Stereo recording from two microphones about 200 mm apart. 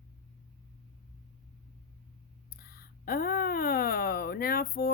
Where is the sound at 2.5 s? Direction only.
50° left (ahead or behind).